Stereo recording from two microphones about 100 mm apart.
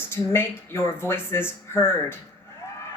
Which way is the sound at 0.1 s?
25° left (ahead or behind).